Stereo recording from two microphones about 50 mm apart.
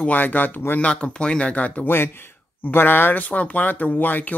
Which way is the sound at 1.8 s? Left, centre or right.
Left.